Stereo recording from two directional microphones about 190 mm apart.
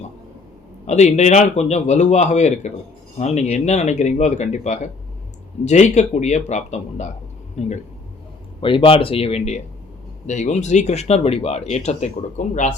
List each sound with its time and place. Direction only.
0.9 s speech: 35° left (ahead or behind)